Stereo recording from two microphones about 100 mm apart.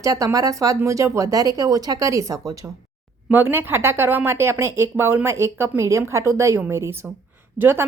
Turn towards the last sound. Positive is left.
turn(degrees=-25)  # may be behind; listen again after turning